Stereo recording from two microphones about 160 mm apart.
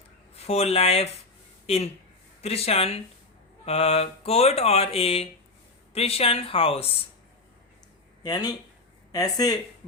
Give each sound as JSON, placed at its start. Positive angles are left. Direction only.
{"t": 0.3, "sound": "speech", "side_deg": 40}
{"t": 8.2, "sound": "speech", "side_deg": 25}